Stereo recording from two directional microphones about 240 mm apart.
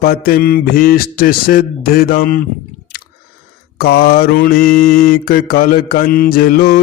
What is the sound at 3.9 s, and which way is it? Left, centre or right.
Mantra, left.